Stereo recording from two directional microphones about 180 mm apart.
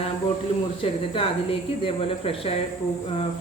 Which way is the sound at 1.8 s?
30° left (ahead or behind).